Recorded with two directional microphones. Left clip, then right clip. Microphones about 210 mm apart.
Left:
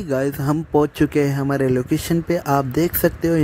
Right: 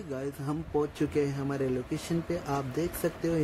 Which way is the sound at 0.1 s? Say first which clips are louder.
Left 15 dB; 40° left (ahead or behind).